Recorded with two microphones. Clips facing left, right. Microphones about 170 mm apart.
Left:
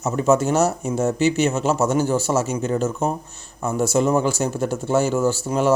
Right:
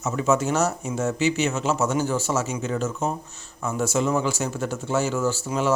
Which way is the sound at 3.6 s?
35° left (ahead or behind).